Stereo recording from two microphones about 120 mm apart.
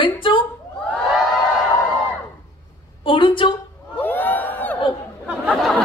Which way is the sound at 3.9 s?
15° left (ahead or behind).